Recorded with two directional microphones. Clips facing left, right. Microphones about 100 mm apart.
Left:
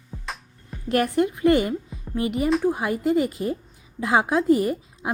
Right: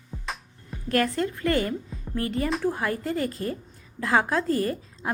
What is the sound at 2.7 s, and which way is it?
A woman's voice, 15° left (ahead or behind).